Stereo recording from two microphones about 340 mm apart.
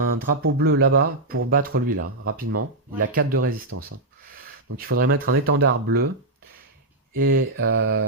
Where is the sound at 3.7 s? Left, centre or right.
Right.